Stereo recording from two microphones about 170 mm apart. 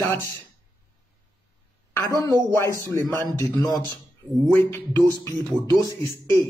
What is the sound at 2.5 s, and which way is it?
Speech, 15° left (ahead or behind).